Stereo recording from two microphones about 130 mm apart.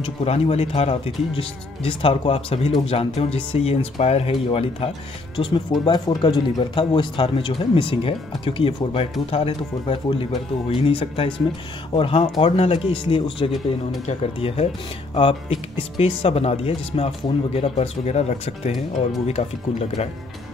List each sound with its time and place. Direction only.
0.0 s speech: 50° left (ahead or behind)